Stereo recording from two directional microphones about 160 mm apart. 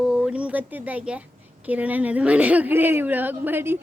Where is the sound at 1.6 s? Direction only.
10° right (ahead or behind).